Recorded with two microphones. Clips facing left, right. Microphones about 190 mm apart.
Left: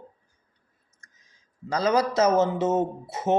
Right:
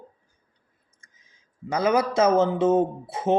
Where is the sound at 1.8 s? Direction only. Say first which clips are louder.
Right 1 dB; 25° right (ahead or behind).